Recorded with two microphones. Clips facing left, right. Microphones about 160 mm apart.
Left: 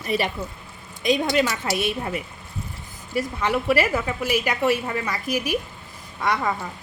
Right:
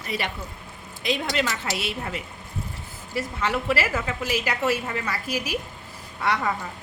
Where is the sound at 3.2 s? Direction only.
15° left (ahead or behind).